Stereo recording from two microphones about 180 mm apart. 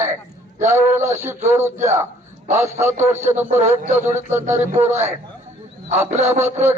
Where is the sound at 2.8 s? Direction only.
15° right (ahead or behind).